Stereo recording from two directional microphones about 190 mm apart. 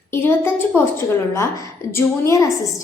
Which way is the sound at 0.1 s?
10° left (ahead or behind).